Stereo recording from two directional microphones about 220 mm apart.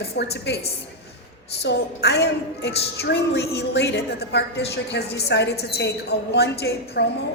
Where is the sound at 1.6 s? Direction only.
50° left (ahead or behind).